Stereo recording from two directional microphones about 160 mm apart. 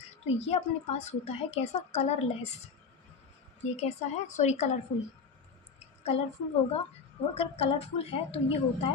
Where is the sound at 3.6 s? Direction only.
45° left (ahead or behind).